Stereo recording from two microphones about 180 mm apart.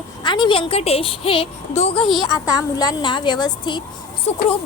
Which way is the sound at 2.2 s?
20° left (ahead or behind).